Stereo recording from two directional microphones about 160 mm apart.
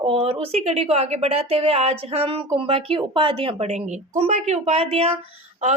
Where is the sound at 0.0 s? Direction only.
35° right (ahead or behind).